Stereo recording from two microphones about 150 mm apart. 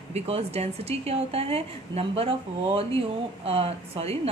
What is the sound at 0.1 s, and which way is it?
A woman's voice, 45° right (ahead or behind).